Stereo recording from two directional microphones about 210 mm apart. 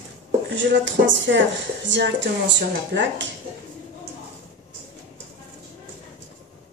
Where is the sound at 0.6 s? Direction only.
60° right (ahead or behind).